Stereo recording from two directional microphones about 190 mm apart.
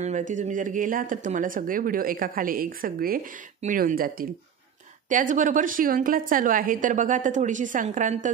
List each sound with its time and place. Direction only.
0.0 s a woman's voice: 40° right (ahead or behind)